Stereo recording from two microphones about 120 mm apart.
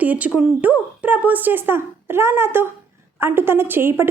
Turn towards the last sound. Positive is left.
turn(degrees=-20)  # may be behind; listen again after turning